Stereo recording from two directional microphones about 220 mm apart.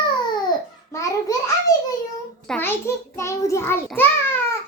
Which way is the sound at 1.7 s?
15° left (ahead or behind).